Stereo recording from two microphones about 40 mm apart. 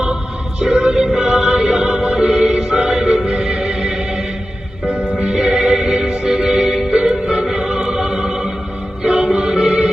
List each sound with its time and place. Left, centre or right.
0.6 s music: right